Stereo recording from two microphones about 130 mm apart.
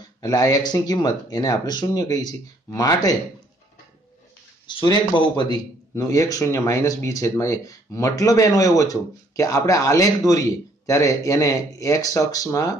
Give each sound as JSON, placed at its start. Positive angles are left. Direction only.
{"t": 0.2, "sound": "a man's voice", "side_deg": 30}
{"t": 4.6, "sound": "a man's voice", "side_deg": 35}